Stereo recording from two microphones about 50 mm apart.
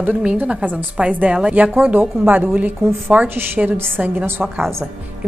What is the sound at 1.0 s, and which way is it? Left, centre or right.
Speech, centre.